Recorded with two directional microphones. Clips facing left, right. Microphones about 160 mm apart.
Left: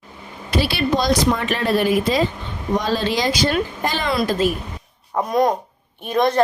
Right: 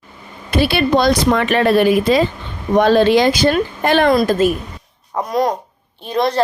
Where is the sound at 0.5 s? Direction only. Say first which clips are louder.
Right 5 dB; 55° right (ahead or behind).